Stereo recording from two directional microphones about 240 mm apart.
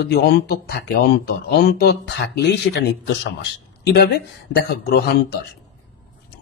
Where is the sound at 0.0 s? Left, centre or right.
Left.